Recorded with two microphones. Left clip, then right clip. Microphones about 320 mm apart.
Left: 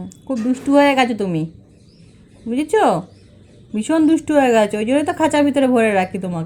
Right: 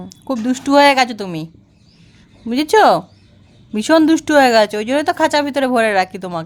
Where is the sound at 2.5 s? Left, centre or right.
Right.